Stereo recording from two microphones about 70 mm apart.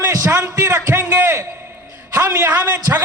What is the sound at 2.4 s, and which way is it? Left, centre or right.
Speech, right.